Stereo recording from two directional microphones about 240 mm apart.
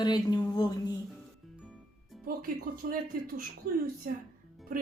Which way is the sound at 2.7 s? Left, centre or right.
Right.